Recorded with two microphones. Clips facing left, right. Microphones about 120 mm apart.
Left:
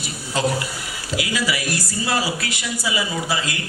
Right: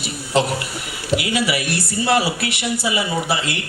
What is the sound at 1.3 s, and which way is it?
A woman's voice, 65° right (ahead or behind).